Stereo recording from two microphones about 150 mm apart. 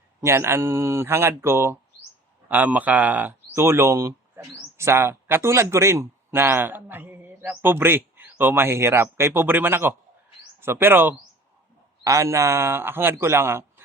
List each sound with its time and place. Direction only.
0.2 s speech: 15° right (ahead or behind)